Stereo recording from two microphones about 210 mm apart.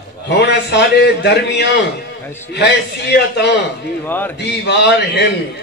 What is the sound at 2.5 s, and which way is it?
A man's voice, 55° left (ahead or behind).